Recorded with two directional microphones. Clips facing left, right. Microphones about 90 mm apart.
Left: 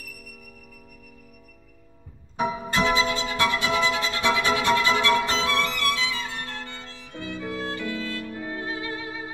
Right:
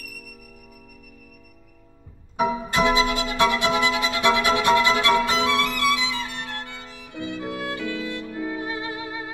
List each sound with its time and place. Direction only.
2.3 s music: 15° right (ahead or behind)